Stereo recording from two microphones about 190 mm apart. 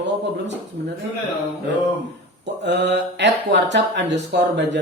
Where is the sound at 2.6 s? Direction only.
70° right (ahead or behind).